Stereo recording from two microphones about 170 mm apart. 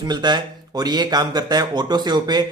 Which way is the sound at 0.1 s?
25° right (ahead or behind).